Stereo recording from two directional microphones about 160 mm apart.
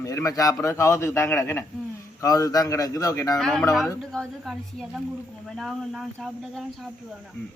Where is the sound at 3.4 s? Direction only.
5° left (ahead or behind).